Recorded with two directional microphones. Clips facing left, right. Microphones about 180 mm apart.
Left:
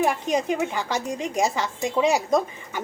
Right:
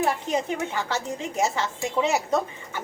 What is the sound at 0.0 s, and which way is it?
Speech, 15° left (ahead or behind).